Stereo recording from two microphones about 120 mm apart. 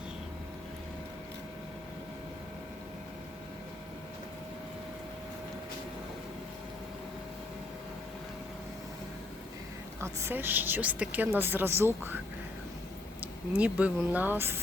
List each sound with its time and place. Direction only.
10.0 s a woman's voice: 20° right (ahead or behind)
13.6 s a woman's voice: 10° right (ahead or behind)